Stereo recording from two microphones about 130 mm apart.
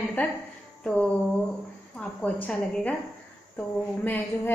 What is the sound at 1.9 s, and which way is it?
A woman's voice, 10° left (ahead or behind).